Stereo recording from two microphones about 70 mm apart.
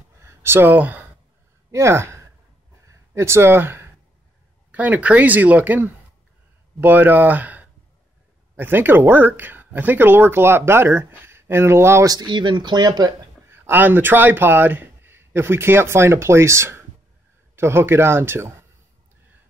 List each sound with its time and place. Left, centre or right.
0.2 s a sound: right
1.7 s speech: right
4.6 s speech: right
12.1 s speech: right
13.5 s speech: right